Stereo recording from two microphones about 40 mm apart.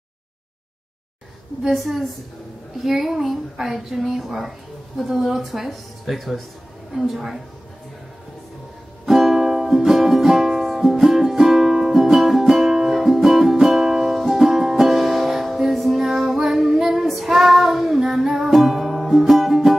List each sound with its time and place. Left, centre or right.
1.6 s a woman's voice: centre
9.0 s music: centre
16.0 s music: centre
16.3 s child singing: centre
18.5 s music: centre